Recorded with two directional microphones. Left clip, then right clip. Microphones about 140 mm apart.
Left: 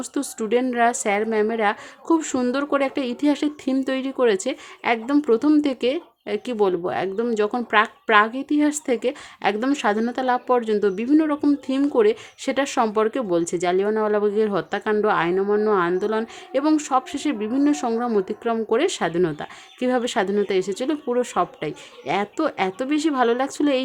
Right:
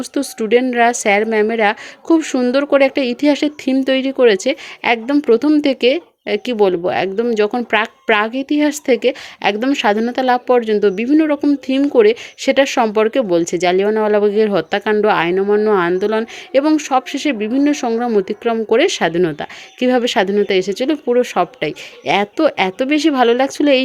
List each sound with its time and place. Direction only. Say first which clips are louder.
0.0 s a woman's voice: right 7 dB; 15° right (ahead or behind)